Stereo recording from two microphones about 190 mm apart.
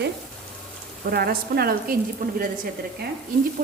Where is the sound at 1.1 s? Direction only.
55° right (ahead or behind).